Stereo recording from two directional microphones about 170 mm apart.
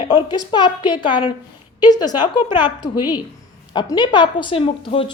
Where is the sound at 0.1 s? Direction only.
25° left (ahead or behind).